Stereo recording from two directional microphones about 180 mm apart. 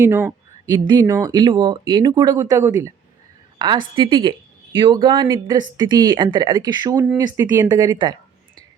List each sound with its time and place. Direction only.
0.0 s speech: 15° right (ahead or behind)